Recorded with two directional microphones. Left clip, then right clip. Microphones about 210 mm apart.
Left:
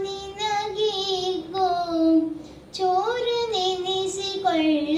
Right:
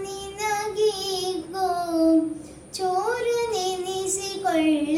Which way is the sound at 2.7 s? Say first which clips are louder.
Left 2 dB; 15° right (ahead or behind).